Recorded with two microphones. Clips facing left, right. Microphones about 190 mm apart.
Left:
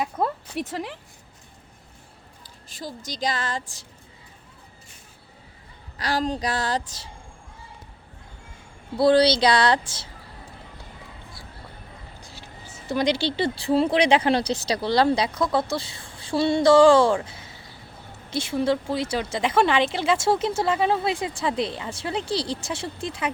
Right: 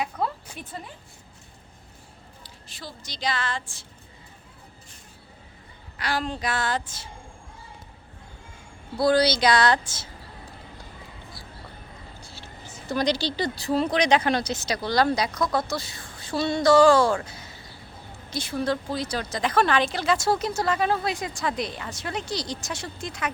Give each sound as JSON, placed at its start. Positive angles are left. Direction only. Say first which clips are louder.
{"t": 0.2, "sound": "a sound", "louder": "left 4 dB", "side_deg": 50}
{"t": 0.5, "sound": "speech", "louder": "left 9 dB", "side_deg": 85}
{"t": 2.7, "sound": "a woman's voice", "louder": "left 6 dB", "side_deg": 45}
{"t": 6.0, "sound": "a woman's voice", "louder": "left 3 dB", "side_deg": 40}
{"t": 9.0, "sound": "a woman's voice", "louder": "left 3 dB", "side_deg": 30}
{"t": 12.2, "sound": "speech", "louder": "even", "side_deg": 15}
{"t": 18.3, "sound": "speech", "louder": "left 4 dB", "side_deg": 25}